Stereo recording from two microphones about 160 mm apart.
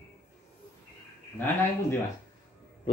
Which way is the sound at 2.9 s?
35° left (ahead or behind).